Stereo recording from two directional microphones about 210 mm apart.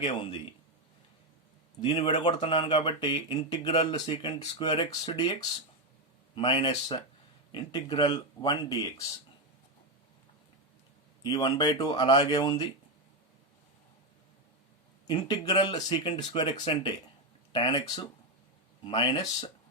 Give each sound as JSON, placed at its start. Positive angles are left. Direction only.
{"t": 0.0, "sound": "speech", "side_deg": 25}
{"t": 1.8, "sound": "speech", "side_deg": 25}
{"t": 11.2, "sound": "speech", "side_deg": 20}
{"t": 15.0, "sound": "speech", "side_deg": 20}